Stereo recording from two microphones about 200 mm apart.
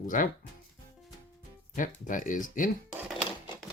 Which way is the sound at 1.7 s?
40° left (ahead or behind).